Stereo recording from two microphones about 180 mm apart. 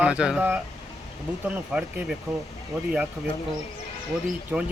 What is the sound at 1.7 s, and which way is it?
Speech, 5° right (ahead or behind).